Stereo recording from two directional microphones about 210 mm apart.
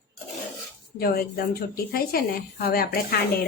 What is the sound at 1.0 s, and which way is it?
Speech, 45° left (ahead or behind).